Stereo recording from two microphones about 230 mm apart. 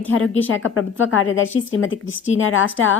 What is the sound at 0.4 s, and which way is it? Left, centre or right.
A woman's voice, left.